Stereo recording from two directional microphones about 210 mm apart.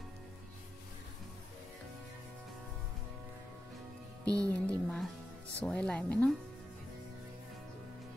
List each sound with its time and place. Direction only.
4.2 s music: 15° right (ahead or behind)
4.5 s music: 5° left (ahead or behind)
5.6 s speech: 5° left (ahead or behind)